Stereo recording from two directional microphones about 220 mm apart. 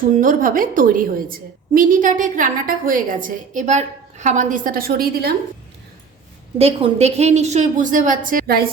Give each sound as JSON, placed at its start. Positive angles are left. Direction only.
{"t": 0.2, "sound": "a woman's voice", "side_deg": -40}
{"t": 6.6, "sound": "a woman's voice", "side_deg": -25}